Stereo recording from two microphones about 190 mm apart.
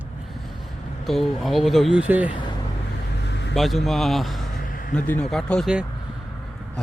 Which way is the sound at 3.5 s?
Centre (ahead or behind).